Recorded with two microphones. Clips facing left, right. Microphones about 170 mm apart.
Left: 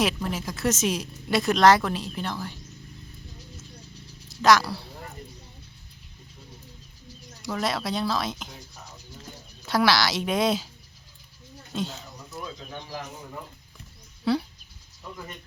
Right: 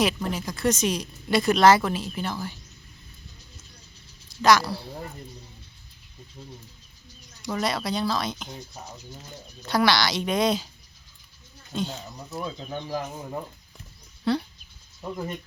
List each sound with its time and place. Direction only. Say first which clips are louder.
0.0 s speech: right 1 dB; centre (ahead or behind)
4.3 s speech: even; centre (ahead or behind)
7.4 s speech: right 1 dB; centre (ahead or behind)
9.6 s speech: even; centre (ahead or behind)
11.7 s speech: right 1 dB; centre (ahead or behind)
12.3 s speech: right 5 dB; 30° right (ahead or behind)
14.3 s speech: even; 5° left (ahead or behind)